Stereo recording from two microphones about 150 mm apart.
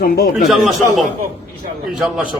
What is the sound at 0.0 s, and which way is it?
Speech, 70° left (ahead or behind).